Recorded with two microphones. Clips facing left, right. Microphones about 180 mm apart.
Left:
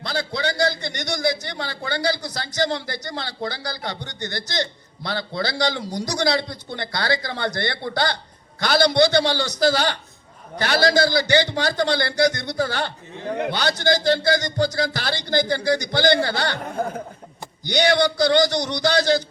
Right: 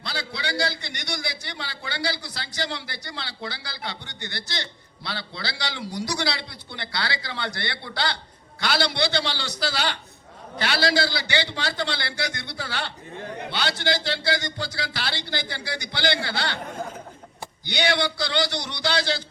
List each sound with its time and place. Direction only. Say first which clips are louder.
0.0 s a man's voice: left 7 dB; 45° left (ahead or behind)
17.7 s a man's voice: left 6 dB; 45° left (ahead or behind)